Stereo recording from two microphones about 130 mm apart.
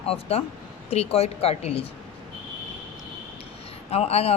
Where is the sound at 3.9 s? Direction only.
55° left (ahead or behind).